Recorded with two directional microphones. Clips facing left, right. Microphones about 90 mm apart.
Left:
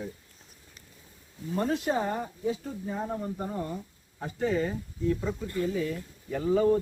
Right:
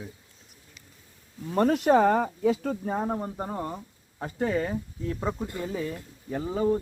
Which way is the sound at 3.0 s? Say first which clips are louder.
Right 3 dB; 40° right (ahead or behind).